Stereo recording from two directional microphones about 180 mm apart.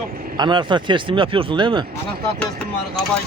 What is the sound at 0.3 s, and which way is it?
Speech, 25° right (ahead or behind).